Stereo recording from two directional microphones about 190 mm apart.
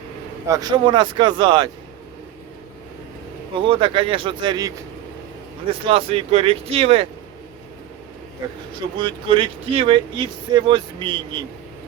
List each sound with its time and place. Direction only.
0.4 s speech: 20° right (ahead or behind)
3.6 s speech: 25° right (ahead or behind)
5.8 s speech: 30° right (ahead or behind)
9.0 s speech: 25° right (ahead or behind)